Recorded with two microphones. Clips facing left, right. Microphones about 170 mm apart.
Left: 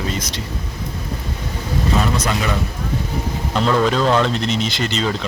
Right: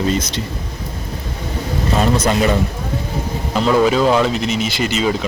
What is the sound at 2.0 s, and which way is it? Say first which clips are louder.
Speech: right 9 dB; 30° right (ahead or behind).